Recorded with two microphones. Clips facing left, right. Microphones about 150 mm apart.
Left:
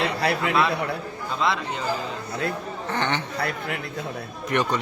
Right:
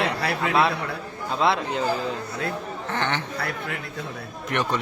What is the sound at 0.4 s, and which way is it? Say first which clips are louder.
Speech: right 3 dB; 30° right (ahead or behind).